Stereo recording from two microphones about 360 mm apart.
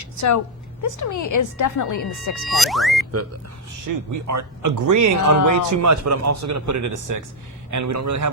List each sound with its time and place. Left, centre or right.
0.0 s a woman's voice: left
2.0 s speech: left
2.5 s speech: centre
3.7 s a man's voice: right